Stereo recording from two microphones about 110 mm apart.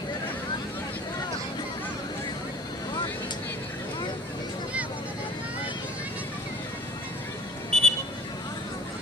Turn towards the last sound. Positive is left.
turn(degrees=5)  # may be behind; listen again after turning